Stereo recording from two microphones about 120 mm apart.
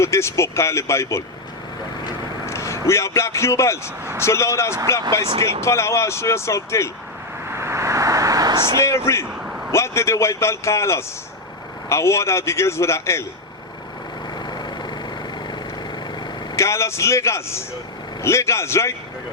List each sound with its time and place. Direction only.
0.0 s a man's voice: 25° left (ahead or behind)
2.5 s a man's voice: 25° left (ahead or behind)
5.2 s speech: 45° right (ahead or behind)
5.5 s a man's voice: 25° left (ahead or behind)
7.4 s vehicle: 20° right (ahead or behind)
8.8 s a man's voice: 25° left (ahead or behind)
14.6 s vehicle: 40° left (ahead or behind)
16.6 s a man's voice: 25° left (ahead or behind)